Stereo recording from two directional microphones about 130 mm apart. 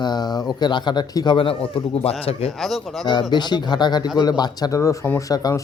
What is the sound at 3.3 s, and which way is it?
Speech, 35° left (ahead or behind).